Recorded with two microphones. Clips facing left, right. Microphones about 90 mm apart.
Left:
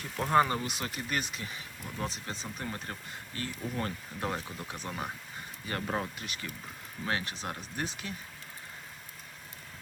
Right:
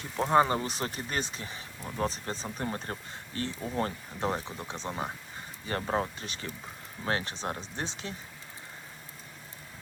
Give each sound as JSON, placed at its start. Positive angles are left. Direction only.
{"t": 0.0, "sound": "speech", "side_deg": -20}